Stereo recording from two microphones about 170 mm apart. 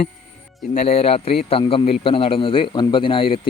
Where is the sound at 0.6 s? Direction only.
40° left (ahead or behind).